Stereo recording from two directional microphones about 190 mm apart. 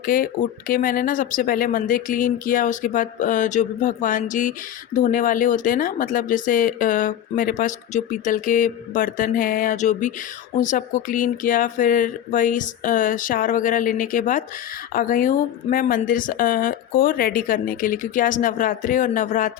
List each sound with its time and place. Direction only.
0.0 s speech: 45° left (ahead or behind)